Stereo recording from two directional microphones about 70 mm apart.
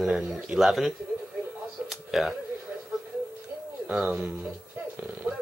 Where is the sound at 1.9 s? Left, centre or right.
Centre.